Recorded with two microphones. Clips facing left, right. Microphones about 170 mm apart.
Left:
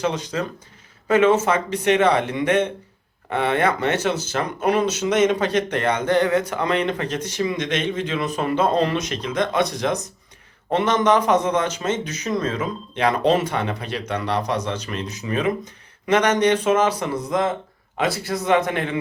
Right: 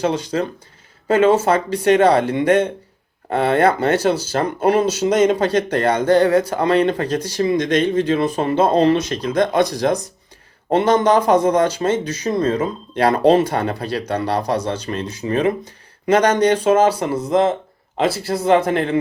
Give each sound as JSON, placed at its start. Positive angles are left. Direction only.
{"t": 0.0, "sound": "speech", "side_deg": -30}